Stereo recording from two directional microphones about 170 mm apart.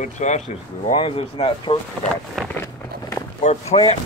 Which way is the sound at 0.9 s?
35° left (ahead or behind).